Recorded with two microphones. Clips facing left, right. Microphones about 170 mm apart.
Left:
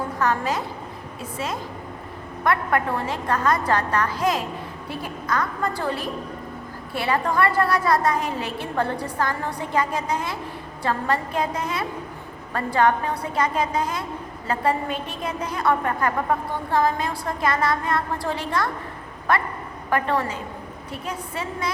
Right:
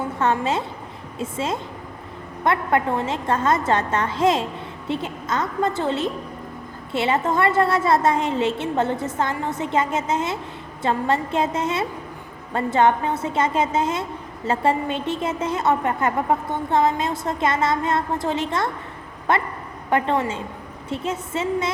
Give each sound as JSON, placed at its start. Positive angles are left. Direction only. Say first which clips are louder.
{"t": 0.2, "sound": "a woman's voice", "louder": "right 2 dB", "side_deg": -25}